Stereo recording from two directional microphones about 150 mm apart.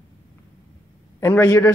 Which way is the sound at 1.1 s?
20° left (ahead or behind).